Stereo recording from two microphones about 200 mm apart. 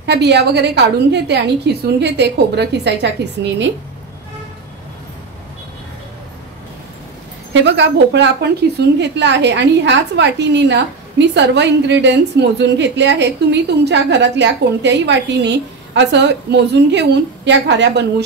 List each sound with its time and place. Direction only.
0.0 s a woman's voice: 60° right (ahead or behind)
7.5 s a woman's voice: 65° right (ahead or behind)